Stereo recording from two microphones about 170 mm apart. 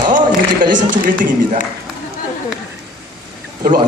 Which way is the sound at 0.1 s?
50° right (ahead or behind).